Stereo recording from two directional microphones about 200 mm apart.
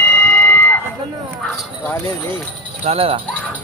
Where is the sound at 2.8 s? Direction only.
30° right (ahead or behind).